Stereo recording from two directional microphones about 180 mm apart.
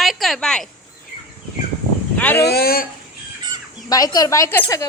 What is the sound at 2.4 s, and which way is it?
Speech, 60° left (ahead or behind).